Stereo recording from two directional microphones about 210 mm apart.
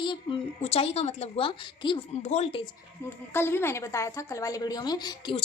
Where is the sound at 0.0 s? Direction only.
25° left (ahead or behind).